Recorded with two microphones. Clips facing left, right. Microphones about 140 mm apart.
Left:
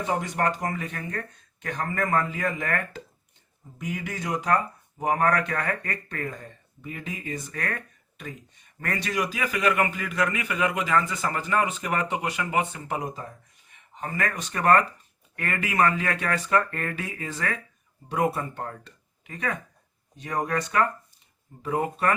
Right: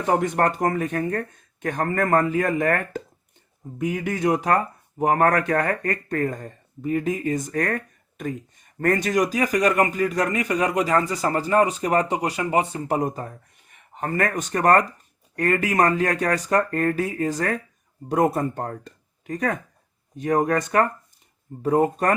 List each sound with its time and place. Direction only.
0.1 s speech: 55° right (ahead or behind); by 22.1 s 40° right (ahead or behind)